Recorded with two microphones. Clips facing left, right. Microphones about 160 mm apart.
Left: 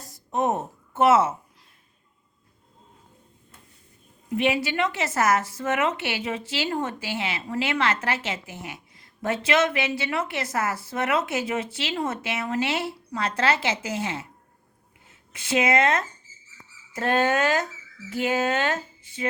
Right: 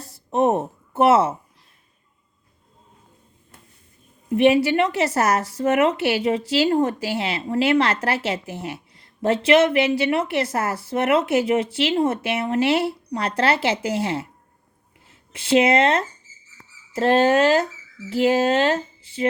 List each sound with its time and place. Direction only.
0.0 s a sound: 30° right (ahead or behind)
4.3 s a woman's voice: 35° right (ahead or behind)
15.3 s a woman's voice: 30° right (ahead or behind)